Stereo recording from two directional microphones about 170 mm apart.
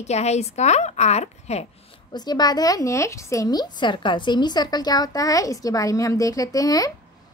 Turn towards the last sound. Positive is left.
turn(degrees=20)  # may be behind; listen again after turning